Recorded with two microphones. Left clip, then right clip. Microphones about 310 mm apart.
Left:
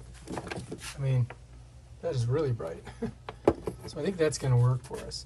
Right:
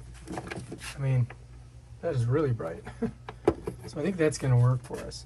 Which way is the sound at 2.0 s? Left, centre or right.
Centre.